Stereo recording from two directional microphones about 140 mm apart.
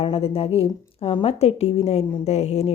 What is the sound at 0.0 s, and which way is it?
A woman's voice, 45° left (ahead or behind).